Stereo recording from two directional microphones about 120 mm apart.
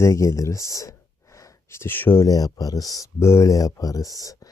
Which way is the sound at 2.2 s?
30° left (ahead or behind).